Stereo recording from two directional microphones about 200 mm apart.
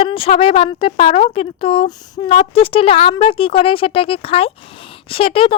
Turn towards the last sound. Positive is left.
turn(degrees=25)  # may be behind; listen again after turning